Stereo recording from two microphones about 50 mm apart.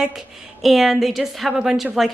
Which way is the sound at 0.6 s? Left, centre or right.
Centre.